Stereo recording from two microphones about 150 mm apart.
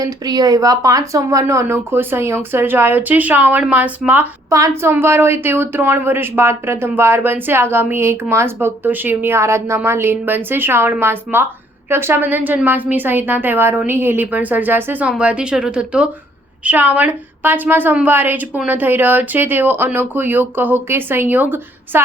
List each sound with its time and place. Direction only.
0.0 s speech: 25° right (ahead or behind)